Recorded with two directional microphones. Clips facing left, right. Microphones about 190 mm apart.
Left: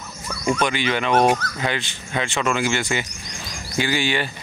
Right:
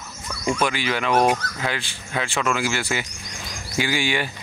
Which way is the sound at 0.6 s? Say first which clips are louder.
Left 1 dB; 5° right (ahead or behind).